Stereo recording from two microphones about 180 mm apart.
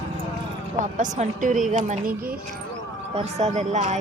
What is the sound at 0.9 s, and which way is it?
A woman's voice, 45° right (ahead or behind).